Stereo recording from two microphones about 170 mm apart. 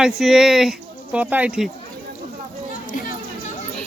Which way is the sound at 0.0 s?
Centre (ahead or behind).